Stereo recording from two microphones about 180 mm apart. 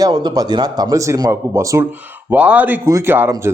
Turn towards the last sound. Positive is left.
turn(degrees=-10)  # may be behind; listen again after turning